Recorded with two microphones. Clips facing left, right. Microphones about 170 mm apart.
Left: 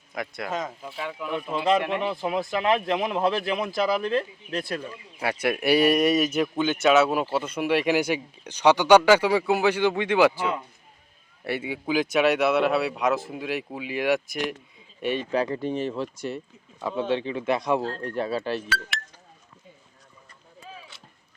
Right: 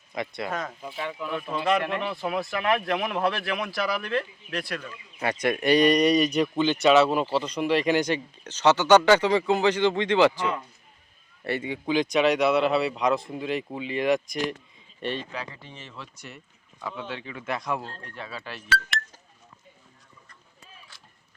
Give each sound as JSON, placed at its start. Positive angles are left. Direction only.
{"t": 0.1, "sound": "speech", "side_deg": 0}
{"t": 1.3, "sound": "speech", "side_deg": 15}
{"t": 2.0, "sound": "speech", "side_deg": 20}
{"t": 5.2, "sound": "speech", "side_deg": 10}
{"t": 15.3, "sound": "speech", "side_deg": 45}
{"t": 16.3, "sound": "speech", "side_deg": 30}
{"t": 18.0, "sound": "speech", "side_deg": 40}